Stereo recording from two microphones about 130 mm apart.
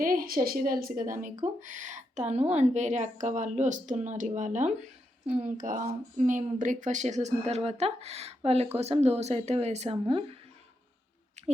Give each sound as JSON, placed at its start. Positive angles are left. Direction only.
{"t": 0.0, "sound": "speech", "side_deg": -90}
{"t": 1.2, "sound": "a woman's voice", "side_deg": -75}
{"t": 11.4, "sound": "a sound", "side_deg": -60}